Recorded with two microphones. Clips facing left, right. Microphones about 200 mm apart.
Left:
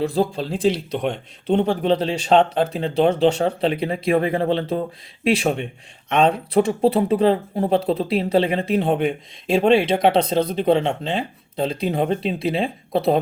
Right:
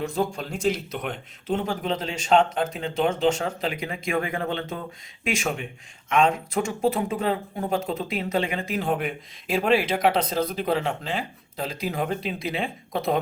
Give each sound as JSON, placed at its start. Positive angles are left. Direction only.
{"t": 0.0, "sound": "speech", "side_deg": 35}